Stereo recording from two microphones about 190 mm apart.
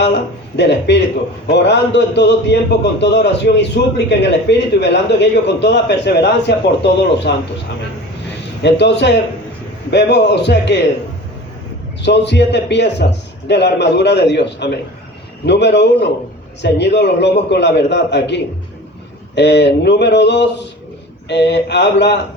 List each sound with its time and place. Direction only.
0.0 s a man's voice: 65° left (ahead or behind)
8.6 s a man's voice: 65° left (ahead or behind)
12.0 s a man's voice: 65° left (ahead or behind)
19.4 s a man's voice: 65° left (ahead or behind)